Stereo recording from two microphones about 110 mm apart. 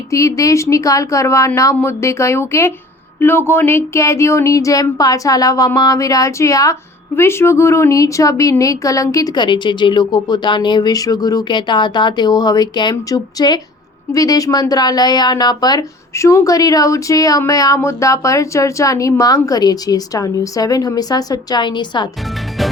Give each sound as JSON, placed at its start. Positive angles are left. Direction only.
{"t": 0.1, "sound": "speech", "side_deg": 30}